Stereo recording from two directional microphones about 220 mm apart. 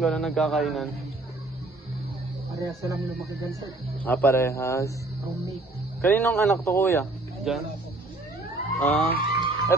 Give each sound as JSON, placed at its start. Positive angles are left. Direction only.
{"t": 0.0, "sound": "speech", "side_deg": 0}
{"t": 2.5, "sound": "speech", "side_deg": -15}
{"t": 4.0, "sound": "a man's voice", "side_deg": 10}
{"t": 5.9, "sound": "a man's voice", "side_deg": 10}
{"t": 7.5, "sound": "speech", "side_deg": 0}
{"t": 8.7, "sound": "a man's voice", "side_deg": 5}
{"t": 9.2, "sound": "a sound", "side_deg": -25}